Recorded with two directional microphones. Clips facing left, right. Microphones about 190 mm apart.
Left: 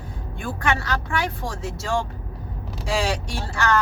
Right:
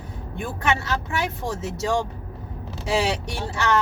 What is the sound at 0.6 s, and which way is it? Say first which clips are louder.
Speech: even; 20° right (ahead or behind).